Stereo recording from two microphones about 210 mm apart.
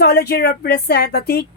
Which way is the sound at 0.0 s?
50° left (ahead or behind).